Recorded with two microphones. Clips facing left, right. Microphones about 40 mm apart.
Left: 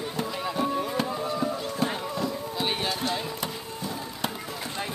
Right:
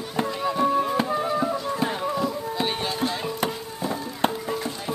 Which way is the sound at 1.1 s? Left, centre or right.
Right.